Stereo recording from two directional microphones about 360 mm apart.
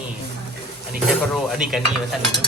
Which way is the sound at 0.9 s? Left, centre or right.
Centre.